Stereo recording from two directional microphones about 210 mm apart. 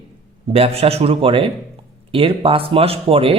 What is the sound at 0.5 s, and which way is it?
Speech, 30° right (ahead or behind).